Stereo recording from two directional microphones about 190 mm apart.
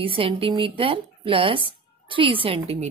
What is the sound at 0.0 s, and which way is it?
Speech, 30° right (ahead or behind).